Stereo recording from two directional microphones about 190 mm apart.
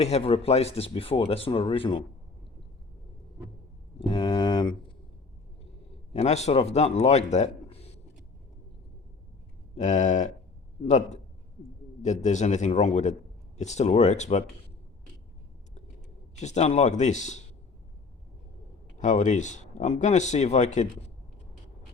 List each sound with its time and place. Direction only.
0.0 s speech: 30° left (ahead or behind)
4.0 s a sound: 25° left (ahead or behind)
6.1 s a man's voice: 35° left (ahead or behind)
9.7 s speech: 40° left (ahead or behind)
16.4 s speech: 35° left (ahead or behind)
18.9 s speech: 40° left (ahead or behind)